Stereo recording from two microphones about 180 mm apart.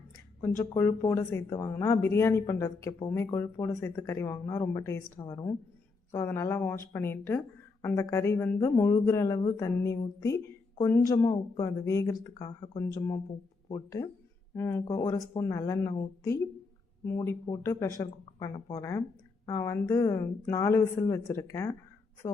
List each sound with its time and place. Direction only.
0.4 s speech: 15° left (ahead or behind)